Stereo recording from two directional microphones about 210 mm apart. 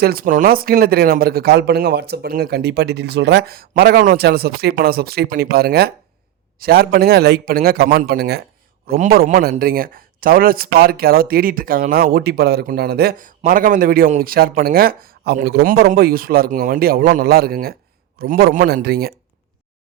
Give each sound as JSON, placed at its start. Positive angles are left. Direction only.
{"t": 0.0, "sound": "a man's voice", "side_deg": -45}